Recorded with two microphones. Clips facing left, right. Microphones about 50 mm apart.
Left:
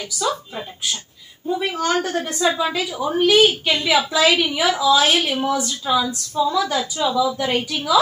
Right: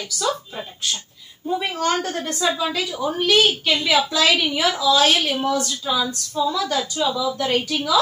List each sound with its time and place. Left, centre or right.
1.8 s a woman's voice: centre
2.4 s a woman's voice: centre